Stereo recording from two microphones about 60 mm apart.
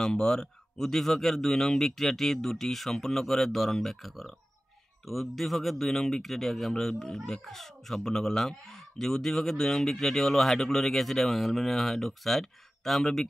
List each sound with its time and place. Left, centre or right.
0.0 s speech: centre